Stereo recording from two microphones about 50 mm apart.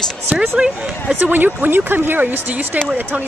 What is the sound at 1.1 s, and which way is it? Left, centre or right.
Speech, right.